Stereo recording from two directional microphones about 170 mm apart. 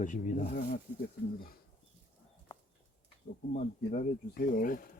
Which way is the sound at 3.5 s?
45° left (ahead or behind).